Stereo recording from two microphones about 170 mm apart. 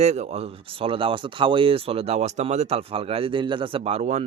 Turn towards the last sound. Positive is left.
turn(degrees=-40)  # may be behind; listen again after turning